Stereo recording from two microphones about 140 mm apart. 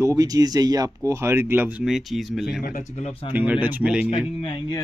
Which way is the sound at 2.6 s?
60° left (ahead or behind).